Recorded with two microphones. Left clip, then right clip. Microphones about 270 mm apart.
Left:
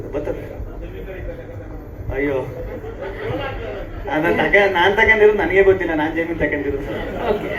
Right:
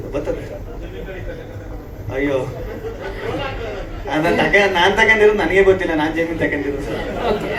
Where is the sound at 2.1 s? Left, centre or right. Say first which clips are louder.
Right 1 dB; right.